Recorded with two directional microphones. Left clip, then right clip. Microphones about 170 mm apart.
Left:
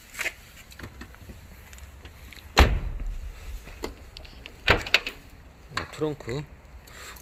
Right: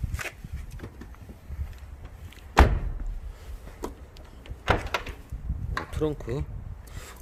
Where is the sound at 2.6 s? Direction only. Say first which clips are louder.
Even; 55° right (ahead or behind).